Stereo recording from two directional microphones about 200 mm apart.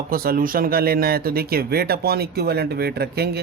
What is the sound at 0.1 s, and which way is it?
Speech, 45° right (ahead or behind).